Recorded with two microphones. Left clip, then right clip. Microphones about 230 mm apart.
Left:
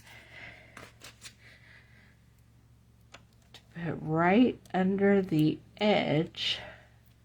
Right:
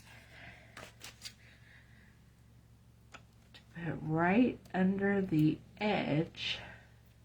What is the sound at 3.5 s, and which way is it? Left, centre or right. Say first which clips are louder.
Speech: left 4 dB; left.